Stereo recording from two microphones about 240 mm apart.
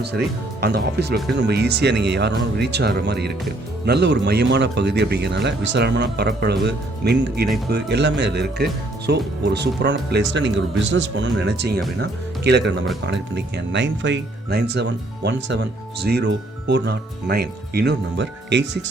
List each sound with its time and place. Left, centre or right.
0.6 s speech: right